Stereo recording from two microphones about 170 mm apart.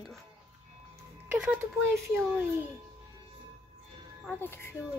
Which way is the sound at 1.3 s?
10° right (ahead or behind).